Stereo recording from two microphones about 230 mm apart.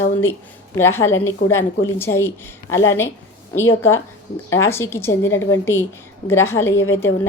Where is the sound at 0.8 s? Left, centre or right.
Centre.